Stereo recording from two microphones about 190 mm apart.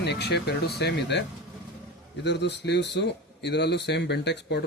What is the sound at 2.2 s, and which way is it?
Speech, 65° left (ahead or behind).